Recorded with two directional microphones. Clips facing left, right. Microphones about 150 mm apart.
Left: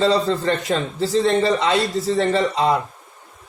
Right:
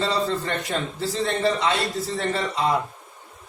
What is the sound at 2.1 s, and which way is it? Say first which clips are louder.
Speech: left 8 dB; 90° left.